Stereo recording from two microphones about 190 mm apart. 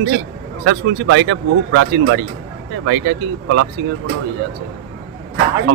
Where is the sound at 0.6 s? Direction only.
90° right.